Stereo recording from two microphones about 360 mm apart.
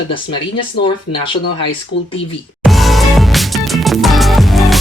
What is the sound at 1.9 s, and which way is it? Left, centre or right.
Speech, left.